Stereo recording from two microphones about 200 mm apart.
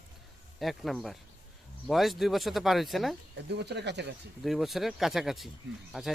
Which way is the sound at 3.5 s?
60° right (ahead or behind).